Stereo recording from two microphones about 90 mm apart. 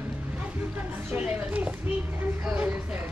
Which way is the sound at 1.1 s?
15° right (ahead or behind).